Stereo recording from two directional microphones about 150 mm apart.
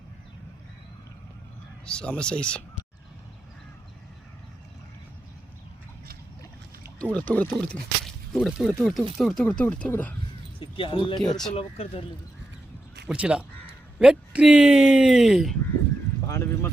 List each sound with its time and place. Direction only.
1.8 s speech: 5° left (ahead or behind)
7.0 s speech: 10° left (ahead or behind)
10.6 s speech: 35° left (ahead or behind)
13.1 s speech: 5° right (ahead or behind)
16.3 s speech: 15° left (ahead or behind)